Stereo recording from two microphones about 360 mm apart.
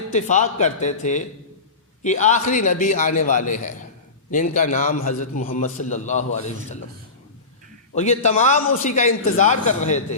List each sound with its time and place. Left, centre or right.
0.1 s a man's voice: centre
7.9 s a man's voice: centre